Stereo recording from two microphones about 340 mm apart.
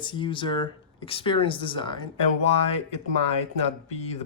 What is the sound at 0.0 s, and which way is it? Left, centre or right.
Speech, centre.